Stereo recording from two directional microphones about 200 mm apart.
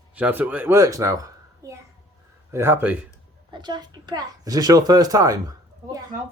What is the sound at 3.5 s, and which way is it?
A woman's voice, 20° right (ahead or behind).